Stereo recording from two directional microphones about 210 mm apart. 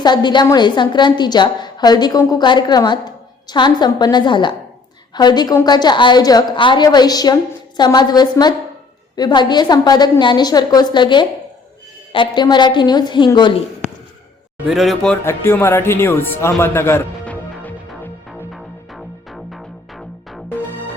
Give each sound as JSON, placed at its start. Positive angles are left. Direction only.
{"t": 0.0, "sound": "a woman's voice", "side_deg": 20}
{"t": 14.7, "sound": "speech", "side_deg": 0}
{"t": 17.5, "sound": "music", "side_deg": 5}